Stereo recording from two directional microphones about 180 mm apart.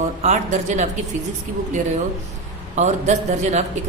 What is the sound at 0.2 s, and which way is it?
Speech, 40° right (ahead or behind).